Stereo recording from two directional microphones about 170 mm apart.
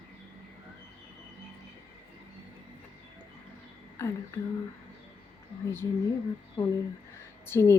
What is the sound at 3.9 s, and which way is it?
Speech, 15° left (ahead or behind).